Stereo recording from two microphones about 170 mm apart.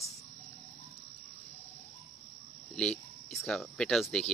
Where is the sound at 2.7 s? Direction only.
5° left (ahead or behind).